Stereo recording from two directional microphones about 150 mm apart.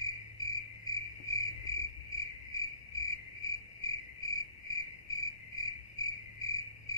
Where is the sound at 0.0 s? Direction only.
25° left (ahead or behind).